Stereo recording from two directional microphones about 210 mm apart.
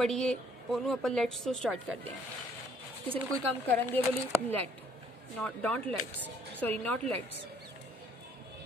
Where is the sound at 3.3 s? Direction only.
5° left (ahead or behind).